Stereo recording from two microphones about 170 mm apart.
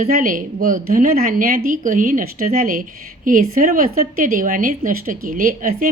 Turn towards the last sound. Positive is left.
turn(degrees=-50)  # may be behind; listen again after turning